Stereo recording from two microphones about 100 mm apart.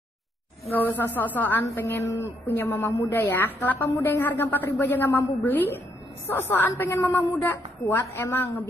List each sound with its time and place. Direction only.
0.8 s speech: 20° left (ahead or behind)